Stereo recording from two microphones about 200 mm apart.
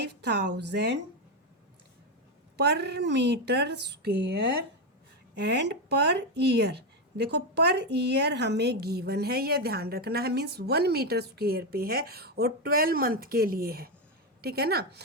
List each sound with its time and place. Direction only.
0.0 s a woman's voice: 55° right (ahead or behind)
2.6 s a woman's voice: 55° right (ahead or behind)